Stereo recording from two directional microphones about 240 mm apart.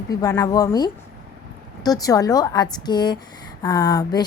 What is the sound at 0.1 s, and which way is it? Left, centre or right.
Speech, centre.